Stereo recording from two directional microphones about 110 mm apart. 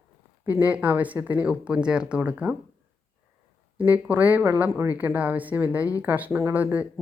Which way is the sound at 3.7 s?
15° right (ahead or behind).